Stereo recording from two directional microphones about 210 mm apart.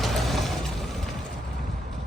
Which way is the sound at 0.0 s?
Centre (ahead or behind).